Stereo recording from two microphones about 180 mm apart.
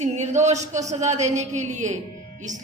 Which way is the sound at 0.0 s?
40° right (ahead or behind).